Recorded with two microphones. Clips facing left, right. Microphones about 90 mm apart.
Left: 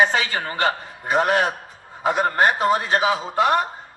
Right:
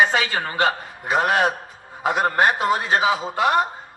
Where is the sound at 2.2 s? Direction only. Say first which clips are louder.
Even; 25° right (ahead or behind).